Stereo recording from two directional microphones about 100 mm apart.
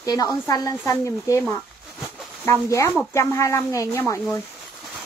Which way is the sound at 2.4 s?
30° left (ahead or behind).